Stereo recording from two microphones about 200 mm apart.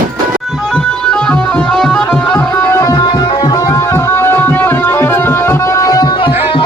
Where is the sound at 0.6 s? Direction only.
5° left (ahead or behind).